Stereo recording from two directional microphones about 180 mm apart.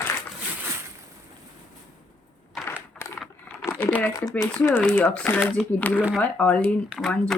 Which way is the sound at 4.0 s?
20° left (ahead or behind).